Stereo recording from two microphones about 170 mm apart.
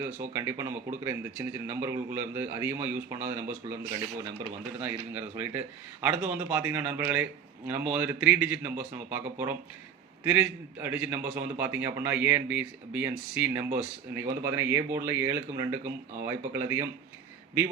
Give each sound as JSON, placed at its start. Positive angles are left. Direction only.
{"t": 0.0, "sound": "speech", "side_deg": -15}